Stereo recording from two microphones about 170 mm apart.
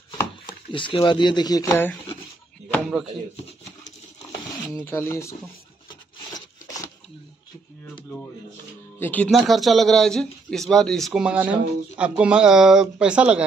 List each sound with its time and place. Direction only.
0.5 s speech: 30° left (ahead or behind); by 2.0 s 10° left (ahead or behind)
2.8 s speech: 5° right (ahead or behind)
4.7 s speech: 15° left (ahead or behind)
9.0 s speech: 10° left (ahead or behind); by 13.5 s 5° right (ahead or behind)